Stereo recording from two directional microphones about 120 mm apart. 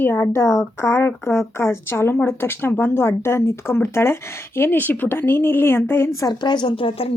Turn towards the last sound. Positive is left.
turn(degrees=45)  # may be behind; listen again after turning